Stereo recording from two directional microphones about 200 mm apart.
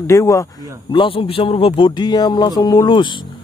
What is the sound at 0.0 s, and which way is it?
Speech, 15° left (ahead or behind).